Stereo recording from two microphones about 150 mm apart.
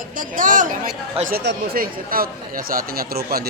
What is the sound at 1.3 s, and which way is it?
Speech, 75° right (ahead or behind).